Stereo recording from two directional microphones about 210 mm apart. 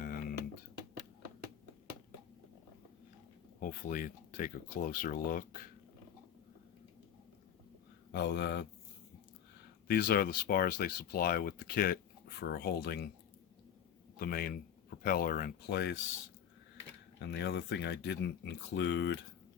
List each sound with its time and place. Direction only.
0.0 s music: 40° left (ahead or behind)
3.6 s speech: 40° left (ahead or behind)
8.1 s speech: 55° left (ahead or behind)
9.8 s speech: 45° left (ahead or behind)
14.2 s speech: 45° left (ahead or behind)
17.2 s speech: 55° left (ahead or behind)